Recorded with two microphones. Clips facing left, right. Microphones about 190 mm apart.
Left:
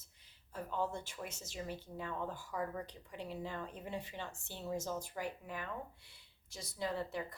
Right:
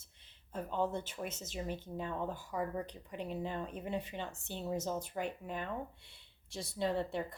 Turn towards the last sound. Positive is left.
turn(degrees=-25)  # may be behind; listen again after turning